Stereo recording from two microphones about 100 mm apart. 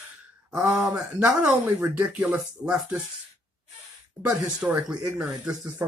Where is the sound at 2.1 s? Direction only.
15° right (ahead or behind).